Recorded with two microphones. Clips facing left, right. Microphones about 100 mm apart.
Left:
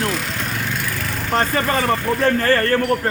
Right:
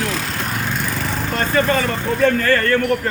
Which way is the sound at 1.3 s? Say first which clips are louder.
Right 1 dB; 35° left (ahead or behind).